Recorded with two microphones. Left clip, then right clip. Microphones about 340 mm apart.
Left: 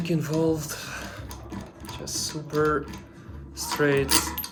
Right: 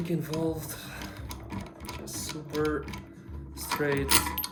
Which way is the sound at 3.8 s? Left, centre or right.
Centre.